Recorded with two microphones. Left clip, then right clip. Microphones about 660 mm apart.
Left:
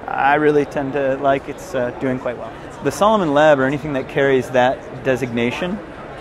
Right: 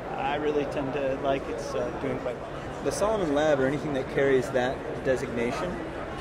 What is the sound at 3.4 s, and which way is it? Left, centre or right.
Speech, left.